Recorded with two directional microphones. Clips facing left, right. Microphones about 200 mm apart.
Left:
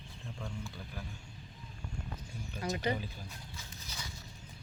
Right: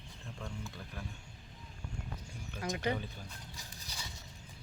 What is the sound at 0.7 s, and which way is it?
Speech, centre (ahead or behind).